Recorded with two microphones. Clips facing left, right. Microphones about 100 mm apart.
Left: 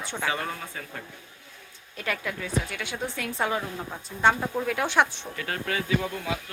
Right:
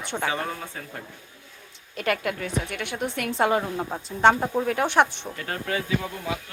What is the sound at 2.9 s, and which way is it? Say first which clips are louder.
Speech: right 3 dB; 15° right (ahead or behind).